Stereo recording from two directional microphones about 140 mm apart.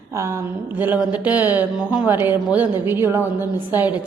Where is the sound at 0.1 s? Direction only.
20° right (ahead or behind).